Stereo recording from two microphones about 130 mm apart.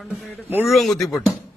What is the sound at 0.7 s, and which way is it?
Speech, centre (ahead or behind).